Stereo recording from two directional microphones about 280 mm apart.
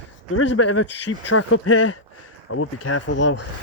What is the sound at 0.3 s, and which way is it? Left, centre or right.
Speech, left.